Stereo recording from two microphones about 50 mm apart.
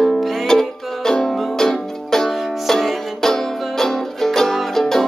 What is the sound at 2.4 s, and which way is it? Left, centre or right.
Music, centre.